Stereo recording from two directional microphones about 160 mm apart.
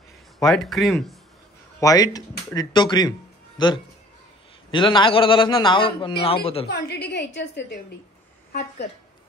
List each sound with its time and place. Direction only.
0.5 s speech: centre (ahead or behind)
1.8 s a man's voice: 20° left (ahead or behind)
6.7 s a woman's voice: 80° left